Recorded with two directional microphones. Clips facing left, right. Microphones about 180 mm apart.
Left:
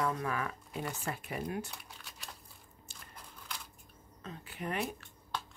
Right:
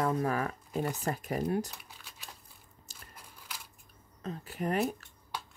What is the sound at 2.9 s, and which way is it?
Crunch, 40° right (ahead or behind).